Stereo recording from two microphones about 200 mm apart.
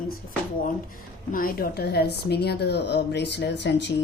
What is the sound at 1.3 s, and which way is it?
A woman's voice, 45° left (ahead or behind).